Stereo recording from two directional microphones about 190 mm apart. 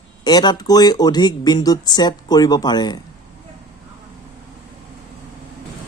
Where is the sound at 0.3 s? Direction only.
20° left (ahead or behind).